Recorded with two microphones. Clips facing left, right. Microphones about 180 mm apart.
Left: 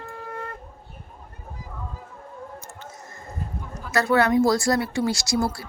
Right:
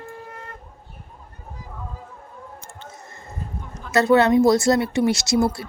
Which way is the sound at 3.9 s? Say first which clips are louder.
Right 4 dB; 20° right (ahead or behind).